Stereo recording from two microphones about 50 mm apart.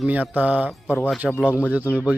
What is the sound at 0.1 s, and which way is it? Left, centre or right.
Speech, right.